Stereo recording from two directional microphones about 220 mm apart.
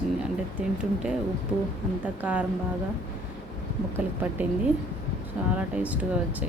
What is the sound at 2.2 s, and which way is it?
Speech, 5° right (ahead or behind).